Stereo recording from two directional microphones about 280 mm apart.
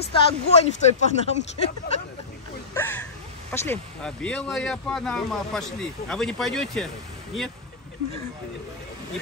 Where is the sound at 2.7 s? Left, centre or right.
Centre.